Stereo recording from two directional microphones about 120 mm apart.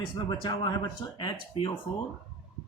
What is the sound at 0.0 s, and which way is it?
Speech, 40° left (ahead or behind).